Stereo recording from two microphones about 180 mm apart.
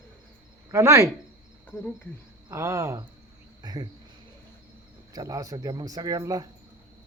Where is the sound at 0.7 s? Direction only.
15° right (ahead or behind).